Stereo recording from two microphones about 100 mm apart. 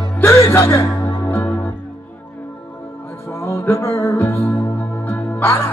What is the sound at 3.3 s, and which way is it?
Music, 25° left (ahead or behind).